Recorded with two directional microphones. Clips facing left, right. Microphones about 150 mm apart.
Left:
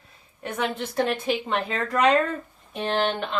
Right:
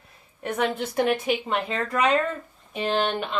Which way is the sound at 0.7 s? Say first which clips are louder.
Right 2 dB; 15° right (ahead or behind).